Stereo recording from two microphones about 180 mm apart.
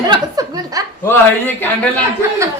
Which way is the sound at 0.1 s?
20° right (ahead or behind).